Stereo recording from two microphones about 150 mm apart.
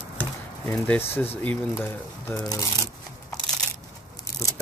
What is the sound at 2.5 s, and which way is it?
Speech, 25° left (ahead or behind).